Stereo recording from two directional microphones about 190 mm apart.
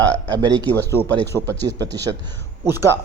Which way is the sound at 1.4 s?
20° right (ahead or behind).